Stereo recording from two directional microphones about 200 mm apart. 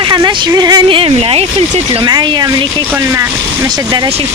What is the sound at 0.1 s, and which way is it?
Speech, 20° right (ahead or behind).